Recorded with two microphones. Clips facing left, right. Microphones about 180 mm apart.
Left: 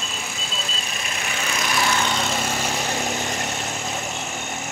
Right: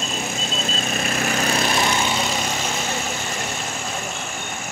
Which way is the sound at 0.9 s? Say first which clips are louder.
Right 8 dB; 45° right (ahead or behind).